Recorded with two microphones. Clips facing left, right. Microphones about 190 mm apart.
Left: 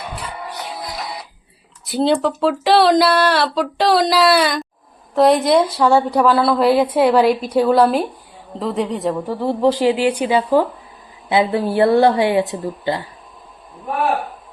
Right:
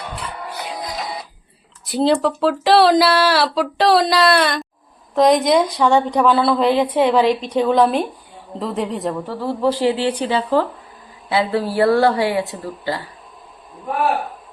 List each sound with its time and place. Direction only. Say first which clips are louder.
1.8 s speech: even; centre (ahead or behind)
9.2 s a woman's voice: left 4 dB; 15° left (ahead or behind)